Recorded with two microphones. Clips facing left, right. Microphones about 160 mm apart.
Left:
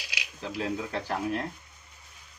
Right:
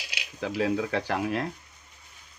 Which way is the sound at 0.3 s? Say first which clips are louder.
Right 6 dB; 80° right.